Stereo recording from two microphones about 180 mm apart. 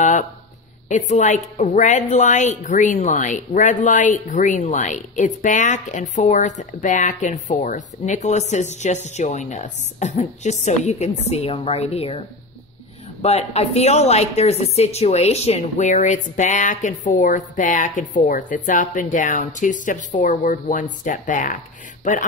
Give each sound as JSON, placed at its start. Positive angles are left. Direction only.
{"t": 0.8, "sound": "a woman's voice", "side_deg": 40}
{"t": 13.2, "sound": "a woman's voice", "side_deg": 35}